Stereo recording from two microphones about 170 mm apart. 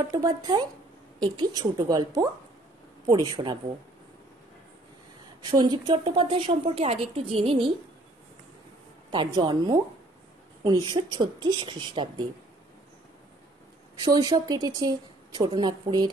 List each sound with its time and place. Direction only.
0.1 s speech: 25° right (ahead or behind)
3.4 s speech: 20° right (ahead or behind)
5.4 s a woman's voice: 25° right (ahead or behind)
9.1 s speech: 25° right (ahead or behind)
14.0 s speech: 25° right (ahead or behind)